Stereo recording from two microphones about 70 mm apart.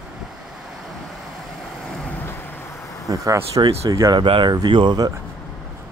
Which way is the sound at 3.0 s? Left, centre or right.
Right.